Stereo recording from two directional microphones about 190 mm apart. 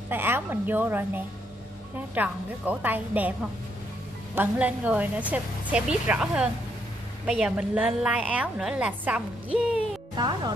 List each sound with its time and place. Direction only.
0.1 s a woman's voice: 10° right (ahead or behind)
4.4 s a woman's voice: 5° right (ahead or behind)
10.1 s speech: 25° right (ahead or behind)